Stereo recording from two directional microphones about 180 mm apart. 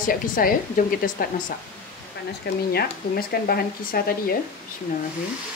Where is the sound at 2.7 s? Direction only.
55° left (ahead or behind).